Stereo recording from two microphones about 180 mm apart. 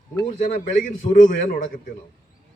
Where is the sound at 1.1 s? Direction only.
45° left (ahead or behind).